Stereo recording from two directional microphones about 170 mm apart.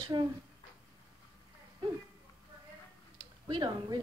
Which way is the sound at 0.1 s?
25° right (ahead or behind).